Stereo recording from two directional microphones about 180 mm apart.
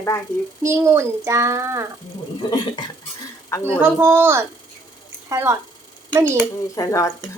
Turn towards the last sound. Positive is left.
turn(degrees=15)  # may be behind; listen again after turning